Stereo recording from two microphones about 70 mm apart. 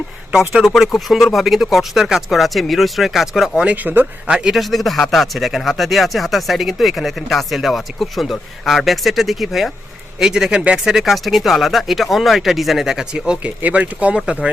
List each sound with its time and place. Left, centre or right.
0.3 s a man's voice: centre
3.6 s speech: right
4.3 s a man's voice: centre
10.9 s a man's voice: centre